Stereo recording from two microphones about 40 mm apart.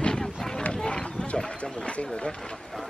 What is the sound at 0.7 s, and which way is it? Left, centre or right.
Run, left.